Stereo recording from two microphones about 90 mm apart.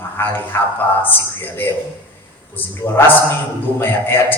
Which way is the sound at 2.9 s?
25° left (ahead or behind).